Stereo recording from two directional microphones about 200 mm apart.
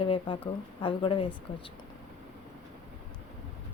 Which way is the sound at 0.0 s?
25° left (ahead or behind).